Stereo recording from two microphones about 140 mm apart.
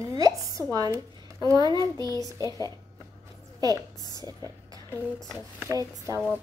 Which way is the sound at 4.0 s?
30° left (ahead or behind).